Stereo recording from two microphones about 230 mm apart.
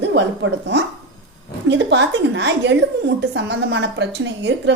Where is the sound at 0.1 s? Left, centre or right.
Right.